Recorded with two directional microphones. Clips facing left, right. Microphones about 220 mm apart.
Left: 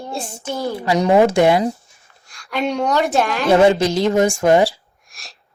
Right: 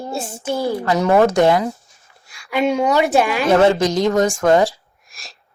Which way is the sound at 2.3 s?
5° right (ahead or behind).